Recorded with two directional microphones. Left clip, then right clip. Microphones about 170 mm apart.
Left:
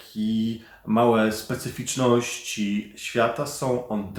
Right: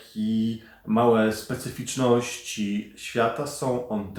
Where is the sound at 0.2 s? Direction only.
20° left (ahead or behind).